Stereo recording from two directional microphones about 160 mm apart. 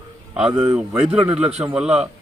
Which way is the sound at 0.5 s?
35° right (ahead or behind).